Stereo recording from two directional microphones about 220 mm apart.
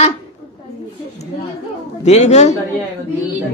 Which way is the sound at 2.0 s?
30° left (ahead or behind).